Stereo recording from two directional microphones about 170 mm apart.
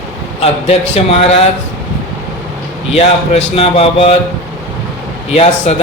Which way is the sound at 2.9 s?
40° left (ahead or behind).